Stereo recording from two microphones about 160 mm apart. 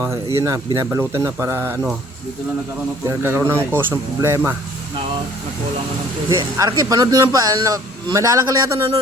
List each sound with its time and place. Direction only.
0.3 s a man's voice: 20° right (ahead or behind)
3.1 s speech: 15° right (ahead or behind)
6.6 s a man's voice: 25° right (ahead or behind)